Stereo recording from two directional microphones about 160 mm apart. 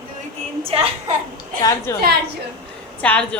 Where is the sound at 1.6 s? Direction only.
20° left (ahead or behind).